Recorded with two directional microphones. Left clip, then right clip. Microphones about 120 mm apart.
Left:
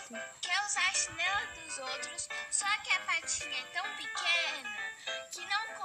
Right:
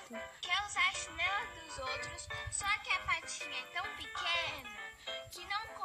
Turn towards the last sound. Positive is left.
turn(degrees=5)  # may be behind; listen again after turning